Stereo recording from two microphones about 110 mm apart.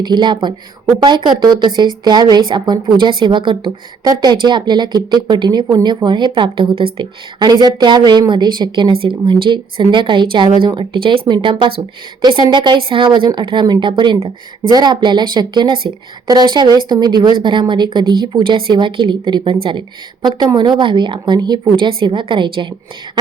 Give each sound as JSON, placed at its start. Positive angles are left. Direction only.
{"t": 0.0, "sound": "a woman's voice", "side_deg": -45}